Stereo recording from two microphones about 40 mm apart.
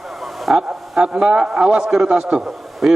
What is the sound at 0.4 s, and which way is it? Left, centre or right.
Speech, centre.